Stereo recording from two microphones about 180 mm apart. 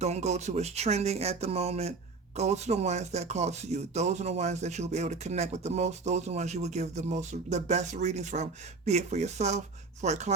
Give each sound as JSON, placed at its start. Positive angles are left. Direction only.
{"t": 0.0, "sound": "speech", "side_deg": -40}